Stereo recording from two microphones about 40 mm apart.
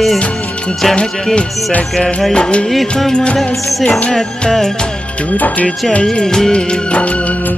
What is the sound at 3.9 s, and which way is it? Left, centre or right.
Music, centre.